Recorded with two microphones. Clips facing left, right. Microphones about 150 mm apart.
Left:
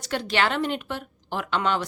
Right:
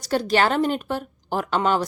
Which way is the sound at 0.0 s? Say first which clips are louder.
Right 5 dB; 40° right (ahead or behind).